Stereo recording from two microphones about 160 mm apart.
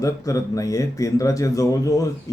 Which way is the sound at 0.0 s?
20° left (ahead or behind).